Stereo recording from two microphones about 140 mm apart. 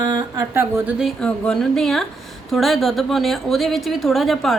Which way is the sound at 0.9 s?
Centre (ahead or behind).